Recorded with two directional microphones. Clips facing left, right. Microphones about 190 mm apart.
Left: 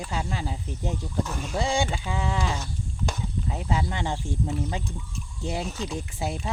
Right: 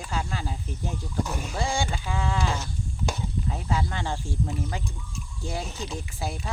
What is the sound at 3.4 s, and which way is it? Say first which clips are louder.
Speech: left 1 dB; 15° left (ahead or behind).